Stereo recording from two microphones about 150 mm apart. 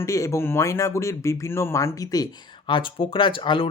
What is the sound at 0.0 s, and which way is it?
Speech, 20° left (ahead or behind).